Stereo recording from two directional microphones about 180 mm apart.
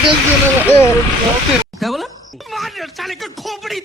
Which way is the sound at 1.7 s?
Centre (ahead or behind).